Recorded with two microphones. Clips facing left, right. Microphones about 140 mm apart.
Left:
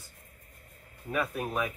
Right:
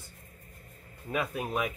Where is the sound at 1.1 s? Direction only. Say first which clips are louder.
Even; 15° right (ahead or behind).